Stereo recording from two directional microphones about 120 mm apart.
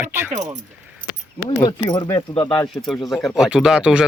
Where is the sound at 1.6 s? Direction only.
35° left (ahead or behind).